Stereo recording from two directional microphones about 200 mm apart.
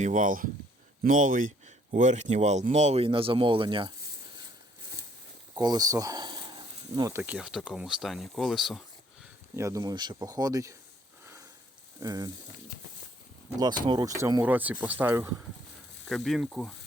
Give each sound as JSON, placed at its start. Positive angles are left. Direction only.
{"t": 0.0, "sound": "speech", "side_deg": -40}
{"t": 5.5, "sound": "speech", "side_deg": -20}
{"t": 9.6, "sound": "speech", "side_deg": -15}
{"t": 11.9, "sound": "speech", "side_deg": -20}
{"t": 13.6, "sound": "speech", "side_deg": -20}
{"t": 16.0, "sound": "speech", "side_deg": 0}